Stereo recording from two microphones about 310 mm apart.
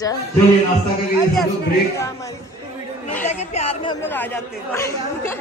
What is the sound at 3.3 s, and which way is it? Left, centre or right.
Speech, left.